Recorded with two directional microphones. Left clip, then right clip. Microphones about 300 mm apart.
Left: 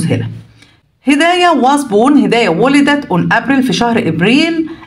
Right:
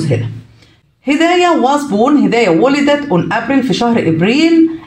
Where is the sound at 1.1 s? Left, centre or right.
Left.